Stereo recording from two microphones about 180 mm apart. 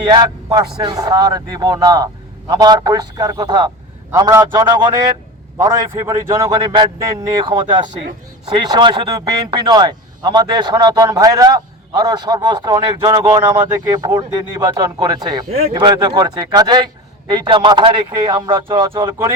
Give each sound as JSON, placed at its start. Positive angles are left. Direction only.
{"t": 0.0, "sound": "a man's voice", "side_deg": -20}